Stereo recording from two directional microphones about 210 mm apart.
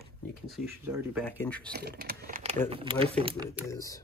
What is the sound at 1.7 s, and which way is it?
Speech, 50° right (ahead or behind).